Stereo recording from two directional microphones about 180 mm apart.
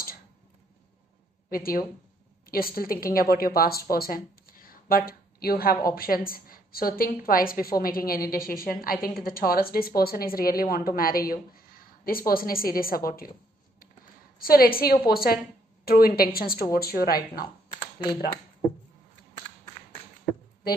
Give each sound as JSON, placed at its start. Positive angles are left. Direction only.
{"t": 1.5, "sound": "a woman's voice", "side_deg": 55}
{"t": 4.6, "sound": "a sound", "side_deg": 55}
{"t": 5.9, "sound": "a woman's voice", "side_deg": 55}
{"t": 14.4, "sound": "a woman's voice", "side_deg": 55}